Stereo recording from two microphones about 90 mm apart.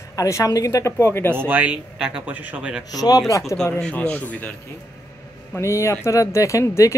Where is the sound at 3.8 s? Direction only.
15° left (ahead or behind).